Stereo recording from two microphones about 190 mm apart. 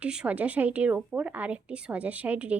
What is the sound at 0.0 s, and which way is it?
Speech, 5° right (ahead or behind).